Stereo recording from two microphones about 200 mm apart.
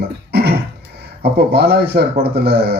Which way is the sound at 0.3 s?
55° right (ahead or behind).